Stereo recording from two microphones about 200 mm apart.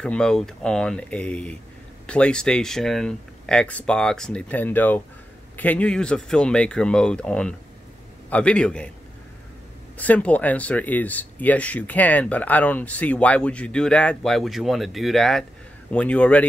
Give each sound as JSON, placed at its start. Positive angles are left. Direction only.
{"t": 0.0, "sound": "speech", "side_deg": 5}
{"t": 9.9, "sound": "speech", "side_deg": 5}